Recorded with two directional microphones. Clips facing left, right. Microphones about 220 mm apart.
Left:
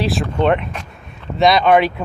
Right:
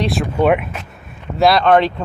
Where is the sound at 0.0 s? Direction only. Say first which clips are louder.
Right 1 dB; centre (ahead or behind).